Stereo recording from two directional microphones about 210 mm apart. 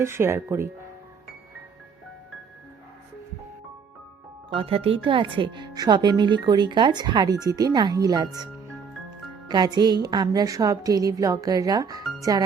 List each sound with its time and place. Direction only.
0.0 s a woman's voice: 10° right (ahead or behind)
4.4 s speech: 25° right (ahead or behind)
9.5 s a woman's voice: 20° right (ahead or behind)